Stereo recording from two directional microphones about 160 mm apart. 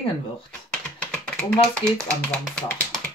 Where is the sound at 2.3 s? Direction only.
5° left (ahead or behind).